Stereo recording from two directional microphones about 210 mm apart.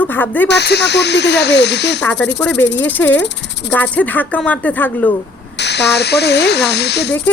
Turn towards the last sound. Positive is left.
turn(degrees=55)  # may be behind; listen again after turning